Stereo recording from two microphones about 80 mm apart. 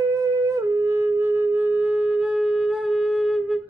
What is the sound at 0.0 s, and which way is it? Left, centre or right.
Wind instrument, right.